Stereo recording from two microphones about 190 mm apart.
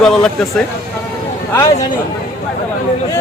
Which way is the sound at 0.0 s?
Centre (ahead or behind).